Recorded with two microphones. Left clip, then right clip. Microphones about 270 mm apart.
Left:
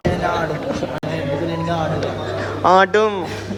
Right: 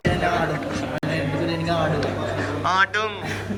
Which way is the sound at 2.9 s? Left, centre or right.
Left.